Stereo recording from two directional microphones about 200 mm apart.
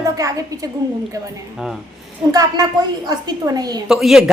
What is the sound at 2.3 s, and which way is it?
A woman's voice, 20° right (ahead or behind).